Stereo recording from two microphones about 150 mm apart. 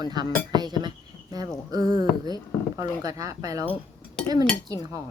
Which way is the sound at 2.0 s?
25° right (ahead or behind).